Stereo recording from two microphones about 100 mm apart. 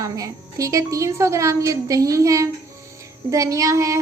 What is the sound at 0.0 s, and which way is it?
Child singing, 35° right (ahead or behind).